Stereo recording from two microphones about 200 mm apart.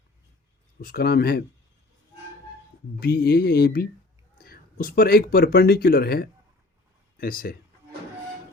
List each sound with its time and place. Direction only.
0.8 s speech: 50° left (ahead or behind)
3.0 s speech: 50° left (ahead or behind)